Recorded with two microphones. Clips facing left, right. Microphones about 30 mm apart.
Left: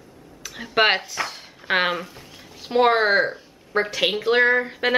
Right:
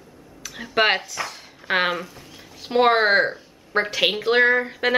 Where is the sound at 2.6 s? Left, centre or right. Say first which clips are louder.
Even; centre.